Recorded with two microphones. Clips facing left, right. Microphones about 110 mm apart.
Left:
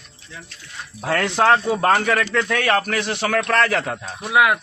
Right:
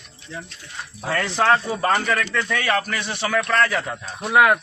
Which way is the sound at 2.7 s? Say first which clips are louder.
Left 3 dB; 55° left (ahead or behind).